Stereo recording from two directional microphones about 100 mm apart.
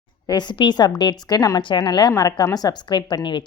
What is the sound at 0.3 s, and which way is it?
A woman's voice, 45° left (ahead or behind).